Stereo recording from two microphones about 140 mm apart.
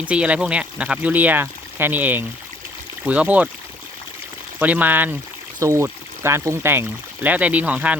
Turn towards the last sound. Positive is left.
turn(degrees=-10)  # may be behind; listen again after turning